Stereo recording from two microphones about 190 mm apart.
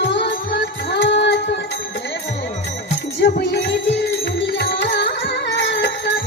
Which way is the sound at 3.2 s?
65° left (ahead or behind).